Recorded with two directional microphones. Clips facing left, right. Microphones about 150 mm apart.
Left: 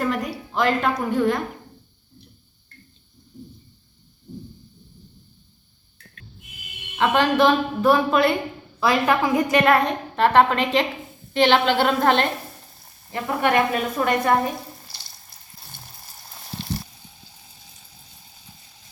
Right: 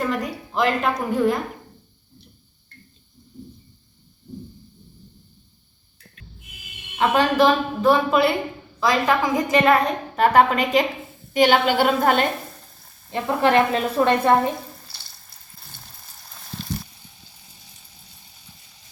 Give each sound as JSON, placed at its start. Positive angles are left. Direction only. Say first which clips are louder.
{"t": 0.0, "sound": "a sound", "louder": "even", "side_deg": 0}
{"t": 0.5, "sound": "a woman's voice", "louder": "even", "side_deg": -5}
{"t": 7.0, "sound": "a woman's voice", "louder": "even", "side_deg": -5}
{"t": 8.8, "sound": "a woman's voice", "louder": "even", "side_deg": 10}
{"t": 13.1, "sound": "a woman's voice", "louder": "right 2 dB", "side_deg": -25}